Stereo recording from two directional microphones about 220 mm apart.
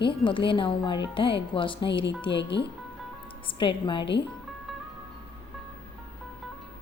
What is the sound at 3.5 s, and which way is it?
Speech, 25° left (ahead or behind).